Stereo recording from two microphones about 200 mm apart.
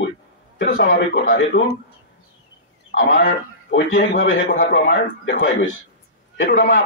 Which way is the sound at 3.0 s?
50° left (ahead or behind).